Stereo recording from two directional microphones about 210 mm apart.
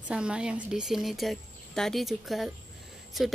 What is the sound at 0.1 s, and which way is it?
Speech, 5° right (ahead or behind).